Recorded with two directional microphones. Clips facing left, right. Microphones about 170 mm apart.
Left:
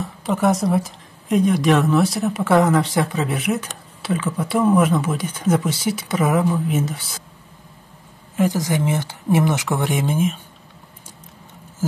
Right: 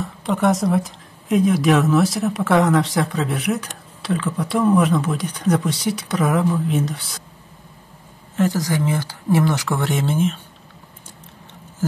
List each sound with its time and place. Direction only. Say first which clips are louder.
0.0 s speech: even; centre (ahead or behind)
8.4 s speech: even; 20° left (ahead or behind)